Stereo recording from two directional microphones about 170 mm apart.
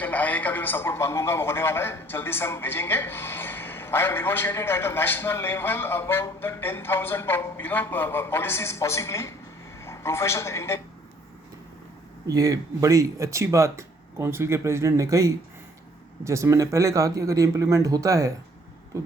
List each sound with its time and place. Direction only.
0.0 s a man's voice: 10° left (ahead or behind)
12.3 s speech: 20° right (ahead or behind)